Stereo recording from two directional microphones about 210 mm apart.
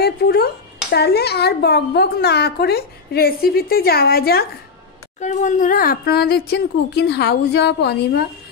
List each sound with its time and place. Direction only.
0.0 s a sound: 50° left (ahead or behind)
0.9 s a woman's voice: 50° left (ahead or behind)
5.2 s a woman's voice: 35° left (ahead or behind); by 8.2 s 50° left (ahead or behind)